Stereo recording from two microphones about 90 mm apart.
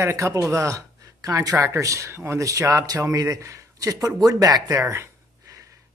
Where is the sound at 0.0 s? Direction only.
35° right (ahead or behind).